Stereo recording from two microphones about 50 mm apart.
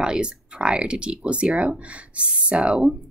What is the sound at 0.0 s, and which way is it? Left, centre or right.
Speech, centre.